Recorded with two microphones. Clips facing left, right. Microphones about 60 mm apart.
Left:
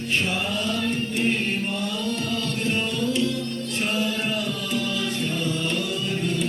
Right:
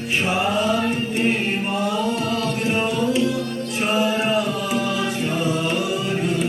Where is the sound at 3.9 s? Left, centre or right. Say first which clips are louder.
Right 8 dB; right.